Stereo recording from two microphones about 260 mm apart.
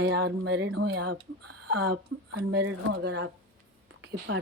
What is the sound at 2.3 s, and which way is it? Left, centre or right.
Speech, right.